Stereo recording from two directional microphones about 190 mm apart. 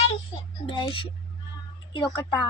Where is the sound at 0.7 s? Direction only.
25° left (ahead or behind).